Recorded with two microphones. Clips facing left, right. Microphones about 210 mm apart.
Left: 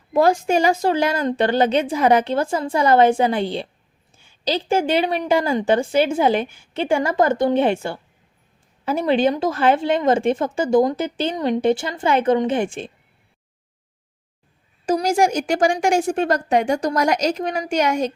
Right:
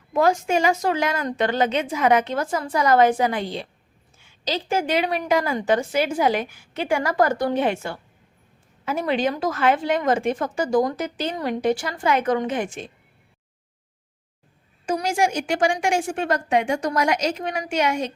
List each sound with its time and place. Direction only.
0.1 s a woman's voice: 35° left (ahead or behind)
14.8 s a woman's voice: 40° left (ahead or behind)